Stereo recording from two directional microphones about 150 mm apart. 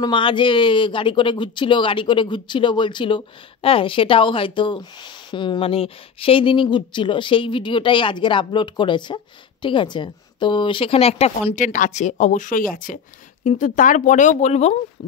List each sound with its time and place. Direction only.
0.0 s speech: 30° left (ahead or behind)